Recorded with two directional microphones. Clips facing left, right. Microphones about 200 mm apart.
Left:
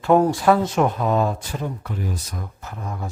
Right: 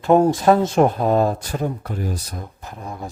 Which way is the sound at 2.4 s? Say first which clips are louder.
Even; 15° right (ahead or behind).